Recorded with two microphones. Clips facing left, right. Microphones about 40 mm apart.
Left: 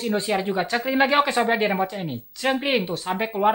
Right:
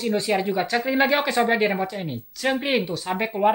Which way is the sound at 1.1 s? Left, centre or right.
Left.